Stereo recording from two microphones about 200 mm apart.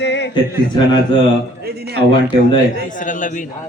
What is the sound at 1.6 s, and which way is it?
Speech, 55° right (ahead or behind).